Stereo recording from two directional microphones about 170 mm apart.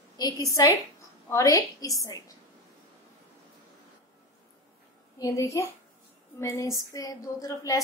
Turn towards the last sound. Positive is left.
turn(degrees=20)  # may be behind; listen again after turning